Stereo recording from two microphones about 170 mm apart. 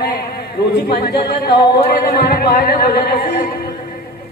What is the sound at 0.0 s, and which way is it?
Speech, 65° left (ahead or behind).